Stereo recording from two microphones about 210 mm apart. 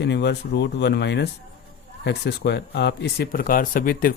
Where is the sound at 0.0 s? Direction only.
55° left (ahead or behind).